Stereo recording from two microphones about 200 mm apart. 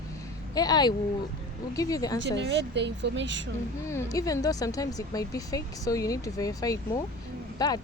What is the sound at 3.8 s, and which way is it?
A woman's voice, 15° left (ahead or behind).